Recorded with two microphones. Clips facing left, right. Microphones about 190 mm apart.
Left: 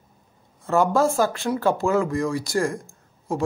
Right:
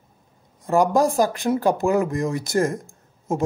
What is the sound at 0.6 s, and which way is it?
Speech, 15° right (ahead or behind).